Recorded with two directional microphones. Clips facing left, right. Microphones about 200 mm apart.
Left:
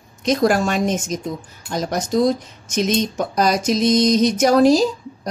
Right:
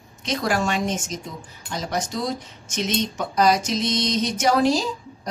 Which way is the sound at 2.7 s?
40° left (ahead or behind).